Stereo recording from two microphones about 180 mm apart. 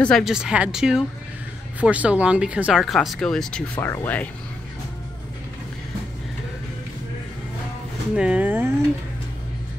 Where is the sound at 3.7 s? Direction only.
15° left (ahead or behind).